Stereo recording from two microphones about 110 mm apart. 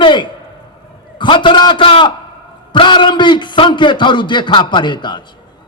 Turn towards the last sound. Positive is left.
turn(degrees=45)  # may be behind; listen again after turning